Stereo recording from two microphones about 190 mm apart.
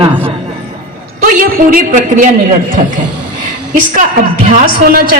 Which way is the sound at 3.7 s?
40° right (ahead or behind).